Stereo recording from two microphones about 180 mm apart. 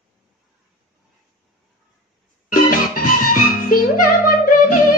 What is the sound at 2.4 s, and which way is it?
Music, 50° left (ahead or behind).